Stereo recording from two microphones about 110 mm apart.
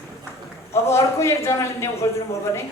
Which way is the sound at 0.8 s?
25° left (ahead or behind).